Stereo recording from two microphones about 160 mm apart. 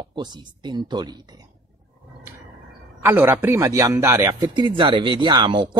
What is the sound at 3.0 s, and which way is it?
Speech, 15° right (ahead or behind).